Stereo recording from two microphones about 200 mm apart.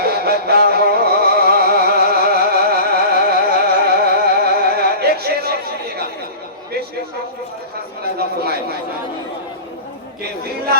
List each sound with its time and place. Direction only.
0.0 s music: 50° right (ahead or behind)